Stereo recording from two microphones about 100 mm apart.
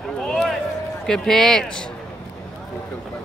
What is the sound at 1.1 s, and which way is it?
Speech, 5° left (ahead or behind).